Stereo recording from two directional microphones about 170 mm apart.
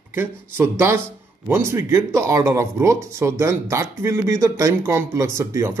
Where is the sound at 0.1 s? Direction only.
15° right (ahead or behind).